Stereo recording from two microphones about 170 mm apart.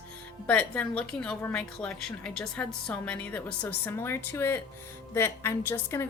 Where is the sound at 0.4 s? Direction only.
10° left (ahead or behind).